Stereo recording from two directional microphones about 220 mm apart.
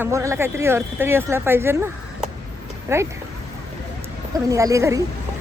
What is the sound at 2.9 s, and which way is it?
Speech, 15° right (ahead or behind).